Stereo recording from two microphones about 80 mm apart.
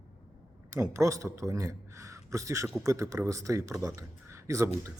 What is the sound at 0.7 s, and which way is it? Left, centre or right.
A man's voice, right.